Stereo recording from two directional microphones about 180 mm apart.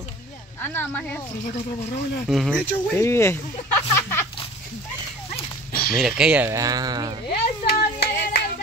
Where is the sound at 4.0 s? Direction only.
15° left (ahead or behind).